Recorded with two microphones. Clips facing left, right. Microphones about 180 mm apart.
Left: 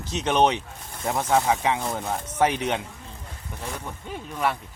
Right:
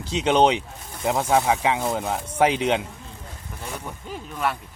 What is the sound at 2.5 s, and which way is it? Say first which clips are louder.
Speech: right 4 dB; 90° right.